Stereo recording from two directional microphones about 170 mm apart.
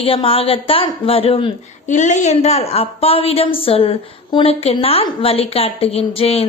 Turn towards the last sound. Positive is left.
turn(degrees=35)  # may be behind; listen again after turning